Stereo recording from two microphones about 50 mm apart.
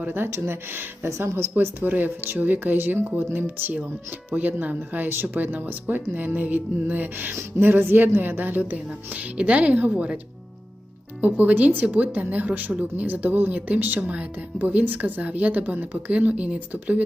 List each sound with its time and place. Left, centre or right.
0.0 s speech: right
1.0 s speech: right
1.8 s speech: right
4.4 s a woman's voice: right
11.2 s speech: right